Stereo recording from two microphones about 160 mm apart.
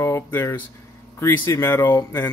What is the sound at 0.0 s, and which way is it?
Speech, 15° left (ahead or behind).